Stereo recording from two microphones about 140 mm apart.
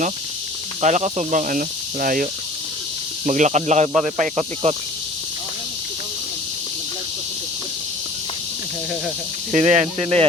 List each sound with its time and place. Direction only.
0.8 s speech: 55° right (ahead or behind); by 2.2 s 80° right
3.2 s speech: 60° right (ahead or behind)
9.5 s speech: 55° right (ahead or behind)